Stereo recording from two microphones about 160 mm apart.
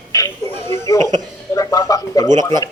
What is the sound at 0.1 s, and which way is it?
Music, 20° left (ahead or behind).